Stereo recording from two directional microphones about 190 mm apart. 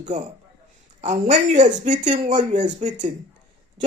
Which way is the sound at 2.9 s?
20° right (ahead or behind).